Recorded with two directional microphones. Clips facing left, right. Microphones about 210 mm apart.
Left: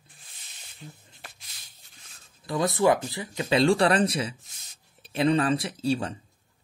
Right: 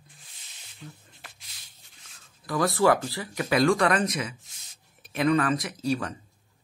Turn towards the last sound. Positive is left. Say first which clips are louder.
# left 1 dB
turn(degrees=30)  # may be behind; listen again after turning